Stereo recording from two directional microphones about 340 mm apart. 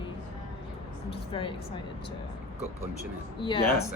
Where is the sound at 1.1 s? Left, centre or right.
Centre.